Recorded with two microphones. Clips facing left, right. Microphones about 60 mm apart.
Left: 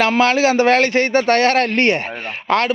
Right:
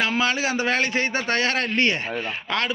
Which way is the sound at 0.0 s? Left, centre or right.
Left.